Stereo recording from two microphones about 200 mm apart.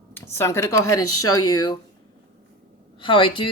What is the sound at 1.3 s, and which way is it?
Speech, 90° left.